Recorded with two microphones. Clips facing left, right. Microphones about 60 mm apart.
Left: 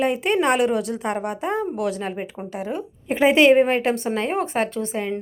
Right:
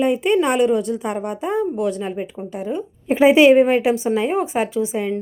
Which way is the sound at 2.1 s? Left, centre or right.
Left.